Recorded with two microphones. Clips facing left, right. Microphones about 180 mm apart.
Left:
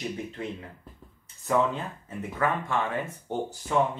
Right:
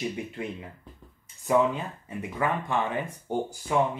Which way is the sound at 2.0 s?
15° right (ahead or behind).